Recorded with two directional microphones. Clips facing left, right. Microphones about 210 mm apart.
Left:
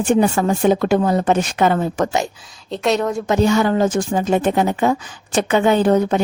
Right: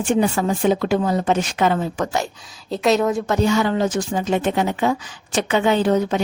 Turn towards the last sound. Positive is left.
turn(degrees=50)  # may be behind; listen again after turning